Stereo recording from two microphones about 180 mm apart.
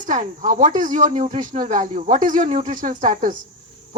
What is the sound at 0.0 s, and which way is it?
Speech, 45° right (ahead or behind).